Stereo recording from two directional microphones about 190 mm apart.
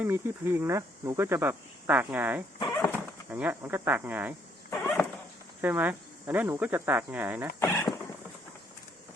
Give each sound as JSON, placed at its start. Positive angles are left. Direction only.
{"t": 0.0, "sound": "speech", "side_deg": -10}
{"t": 4.7, "sound": "a sound", "side_deg": 10}
{"t": 5.6, "sound": "speech", "side_deg": -10}
{"t": 7.6, "sound": "speech", "side_deg": 15}